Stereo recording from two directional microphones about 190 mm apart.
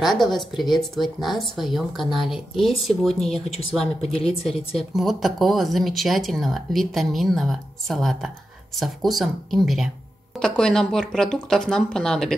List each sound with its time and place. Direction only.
0.0 s speech: centre (ahead or behind)
3.8 s a woman's voice: 30° left (ahead or behind)
4.5 s speech: centre (ahead or behind)